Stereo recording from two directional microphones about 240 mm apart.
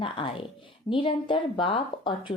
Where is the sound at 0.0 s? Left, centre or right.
Left.